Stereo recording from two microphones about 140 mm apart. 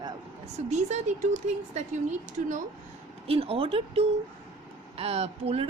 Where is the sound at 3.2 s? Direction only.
45° right (ahead or behind).